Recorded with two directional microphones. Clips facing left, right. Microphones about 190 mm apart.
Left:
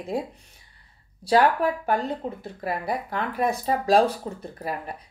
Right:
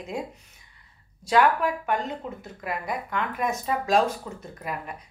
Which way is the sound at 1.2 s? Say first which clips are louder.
Left 2 dB; 35° left (ahead or behind).